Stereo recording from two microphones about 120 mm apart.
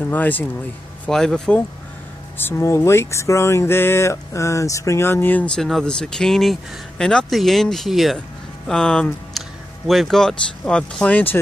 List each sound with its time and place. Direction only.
0.1 s speech: 15° left (ahead or behind)
2.3 s speech: 20° left (ahead or behind)